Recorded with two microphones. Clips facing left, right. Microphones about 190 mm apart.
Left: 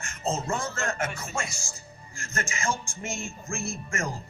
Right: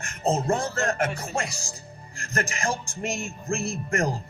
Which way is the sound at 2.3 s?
60° right (ahead or behind).